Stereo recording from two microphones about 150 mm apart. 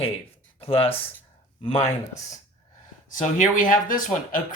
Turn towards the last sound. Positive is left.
turn(degrees=65)  # may be behind; listen again after turning